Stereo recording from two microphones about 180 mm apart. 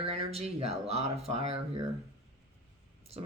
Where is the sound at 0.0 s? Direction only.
35° right (ahead or behind).